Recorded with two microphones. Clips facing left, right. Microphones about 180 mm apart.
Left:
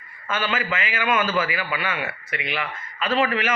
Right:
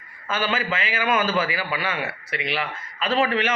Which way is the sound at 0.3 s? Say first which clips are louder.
Right 1 dB; 35° right (ahead or behind).